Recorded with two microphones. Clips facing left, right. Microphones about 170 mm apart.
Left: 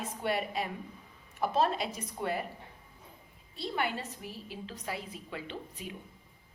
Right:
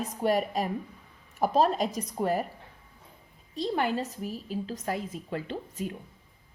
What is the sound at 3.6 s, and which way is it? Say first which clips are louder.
A woman's voice: right 6 dB; 40° right (ahead or behind).